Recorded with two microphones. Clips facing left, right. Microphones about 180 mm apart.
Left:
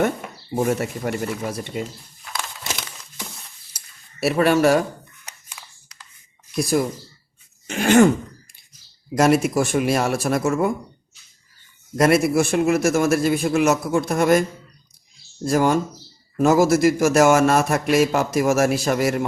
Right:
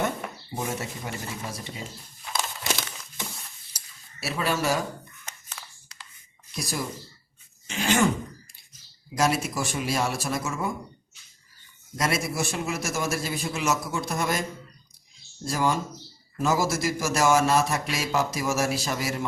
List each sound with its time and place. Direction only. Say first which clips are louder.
0.5 s a man's voice: left 11 dB; 55° left (ahead or behind)
3.8 s a sound: left 14 dB; 60° left (ahead or behind)
5.6 s a sound: even; 10° left (ahead or behind)
6.6 s a man's voice: left 11 dB; 55° left (ahead or behind)
9.1 s a man's voice: left 8 dB; 60° left (ahead or behind)
11.9 s a man's voice: left 11 dB; 60° left (ahead or behind)
15.4 s a man's voice: left 8 dB; 55° left (ahead or behind)